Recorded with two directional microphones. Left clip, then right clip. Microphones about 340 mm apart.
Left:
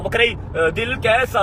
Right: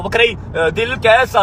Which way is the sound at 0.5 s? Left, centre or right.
Right.